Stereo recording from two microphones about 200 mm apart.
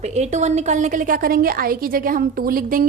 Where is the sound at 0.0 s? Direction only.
35° right (ahead or behind).